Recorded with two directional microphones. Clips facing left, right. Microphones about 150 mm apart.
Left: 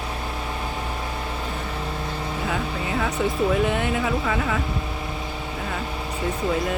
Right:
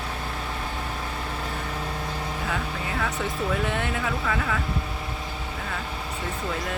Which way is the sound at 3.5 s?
15° left (ahead or behind).